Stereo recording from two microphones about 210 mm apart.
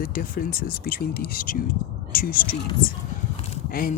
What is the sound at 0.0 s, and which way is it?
Speech, 45° left (ahead or behind).